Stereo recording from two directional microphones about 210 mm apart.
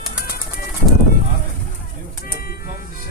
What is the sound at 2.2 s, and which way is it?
Speech, 45° left (ahead or behind).